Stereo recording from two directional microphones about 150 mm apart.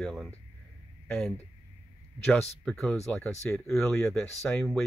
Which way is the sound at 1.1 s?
10° left (ahead or behind).